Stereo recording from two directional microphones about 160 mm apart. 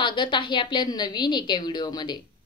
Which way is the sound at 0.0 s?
30° left (ahead or behind).